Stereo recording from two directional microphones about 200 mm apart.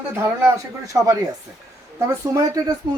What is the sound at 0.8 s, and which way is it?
Speech, 15° right (ahead or behind).